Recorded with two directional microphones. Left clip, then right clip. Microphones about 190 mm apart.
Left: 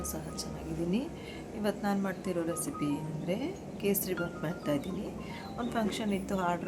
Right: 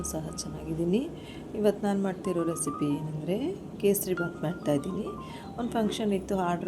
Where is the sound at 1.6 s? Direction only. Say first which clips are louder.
Right 6 dB; 15° right (ahead or behind).